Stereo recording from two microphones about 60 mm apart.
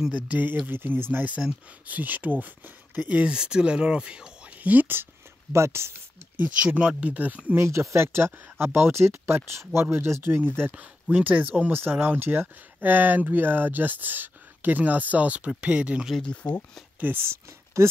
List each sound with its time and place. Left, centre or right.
0.3 s speech: right
3.1 s speech: centre
4.6 s speech: right
5.5 s speech: right
6.3 s speech: right
7.5 s speech: right
10.7 s speech: right
11.6 s speech: right
16.4 s speech: left
17.0 s speech: right
17.8 s speech: right